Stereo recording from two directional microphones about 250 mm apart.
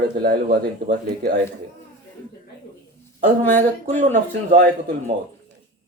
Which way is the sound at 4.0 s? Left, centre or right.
Right.